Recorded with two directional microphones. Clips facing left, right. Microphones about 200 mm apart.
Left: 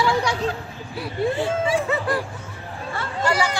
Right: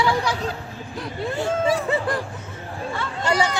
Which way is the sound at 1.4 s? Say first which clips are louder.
Even; 40° right (ahead or behind).